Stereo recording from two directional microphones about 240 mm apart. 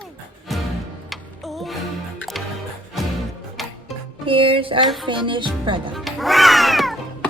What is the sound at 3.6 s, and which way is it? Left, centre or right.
Music, centre.